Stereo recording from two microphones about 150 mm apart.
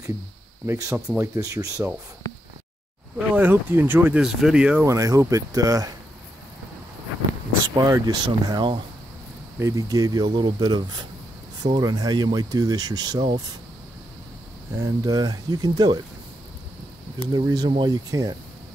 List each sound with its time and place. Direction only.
0.7 s speech: 20° right (ahead or behind)
3.2 s speech: 10° right (ahead or behind)
4.8 s speech: 20° right (ahead or behind)
7.7 s speech: 25° right (ahead or behind)
14.8 s speech: 25° right (ahead or behind)
17.3 s speech: 25° right (ahead or behind)